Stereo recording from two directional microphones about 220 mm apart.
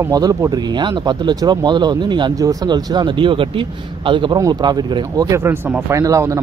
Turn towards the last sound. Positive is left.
turn(degrees=-15)  # may be behind; listen again after turning